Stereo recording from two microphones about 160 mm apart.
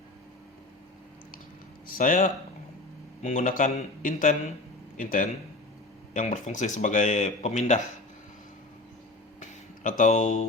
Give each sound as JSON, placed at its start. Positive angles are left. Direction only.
{"t": 1.9, "sound": "speech", "side_deg": 60}
{"t": 10.0, "sound": "speech", "side_deg": 50}